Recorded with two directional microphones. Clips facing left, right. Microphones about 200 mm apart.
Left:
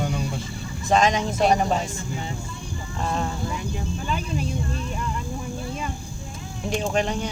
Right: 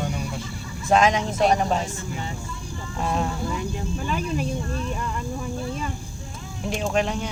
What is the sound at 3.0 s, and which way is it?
Speech, 5° right (ahead or behind).